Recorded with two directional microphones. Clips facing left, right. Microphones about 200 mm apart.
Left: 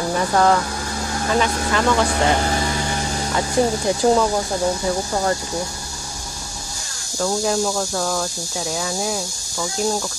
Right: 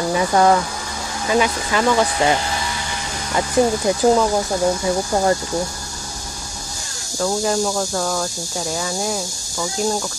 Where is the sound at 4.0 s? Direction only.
5° right (ahead or behind).